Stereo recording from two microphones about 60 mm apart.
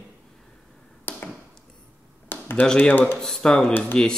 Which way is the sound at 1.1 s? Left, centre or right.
Left.